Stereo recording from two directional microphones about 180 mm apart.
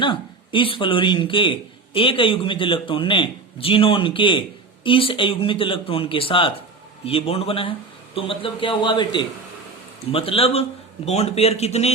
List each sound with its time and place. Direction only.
0.0 s a man's voice: 30° left (ahead or behind)